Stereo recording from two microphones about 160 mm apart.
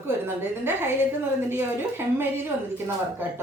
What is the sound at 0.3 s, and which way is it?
A woman's voice, 15° right (ahead or behind).